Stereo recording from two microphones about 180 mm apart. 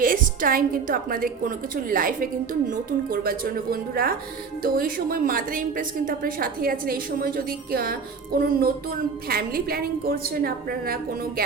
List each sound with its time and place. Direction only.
0.0 s a woman's voice: 50° right (ahead or behind)